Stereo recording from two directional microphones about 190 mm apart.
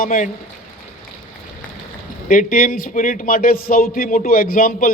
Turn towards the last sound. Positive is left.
turn(degrees=45)  # may be behind; listen again after turning